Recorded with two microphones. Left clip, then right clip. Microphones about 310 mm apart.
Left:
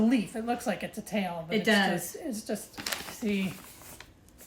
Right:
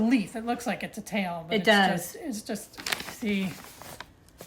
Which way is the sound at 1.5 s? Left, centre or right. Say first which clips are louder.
Right 4 dB; centre.